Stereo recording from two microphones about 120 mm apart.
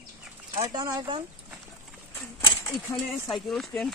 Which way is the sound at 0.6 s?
35° right (ahead or behind).